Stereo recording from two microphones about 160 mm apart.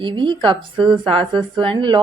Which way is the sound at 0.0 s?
30° right (ahead or behind).